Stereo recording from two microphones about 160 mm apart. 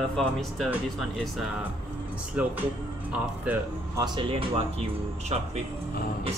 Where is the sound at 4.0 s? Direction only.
30° right (ahead or behind).